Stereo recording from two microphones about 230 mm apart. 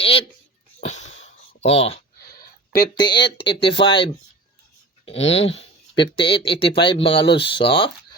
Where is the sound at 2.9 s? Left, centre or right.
Centre.